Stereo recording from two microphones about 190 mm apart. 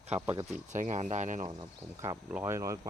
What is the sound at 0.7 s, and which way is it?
Speech, 40° right (ahead or behind).